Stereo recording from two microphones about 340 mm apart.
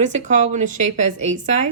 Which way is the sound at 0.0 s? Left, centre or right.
Right.